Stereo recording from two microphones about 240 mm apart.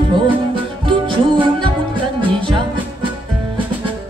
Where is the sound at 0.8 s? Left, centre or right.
Centre.